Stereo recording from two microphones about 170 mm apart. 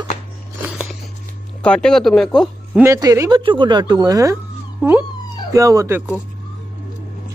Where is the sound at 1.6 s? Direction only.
5° left (ahead or behind).